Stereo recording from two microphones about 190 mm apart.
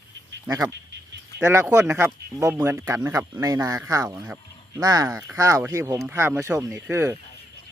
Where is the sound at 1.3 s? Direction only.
15° right (ahead or behind).